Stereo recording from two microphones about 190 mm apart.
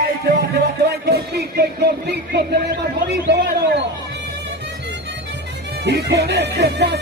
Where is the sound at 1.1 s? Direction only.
55° right (ahead or behind).